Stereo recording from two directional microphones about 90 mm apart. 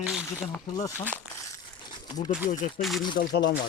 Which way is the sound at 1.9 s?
60° left (ahead or behind).